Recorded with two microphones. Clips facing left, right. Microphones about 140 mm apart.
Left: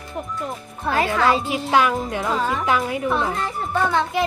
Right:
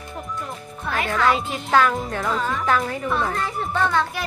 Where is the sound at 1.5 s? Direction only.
10° left (ahead or behind).